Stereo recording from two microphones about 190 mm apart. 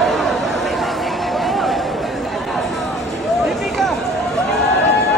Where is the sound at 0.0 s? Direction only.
Centre (ahead or behind).